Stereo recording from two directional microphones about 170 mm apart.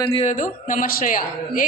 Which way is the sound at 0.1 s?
35° left (ahead or behind).